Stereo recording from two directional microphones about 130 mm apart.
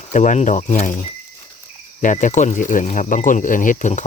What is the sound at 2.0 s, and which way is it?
Speech, 80° left.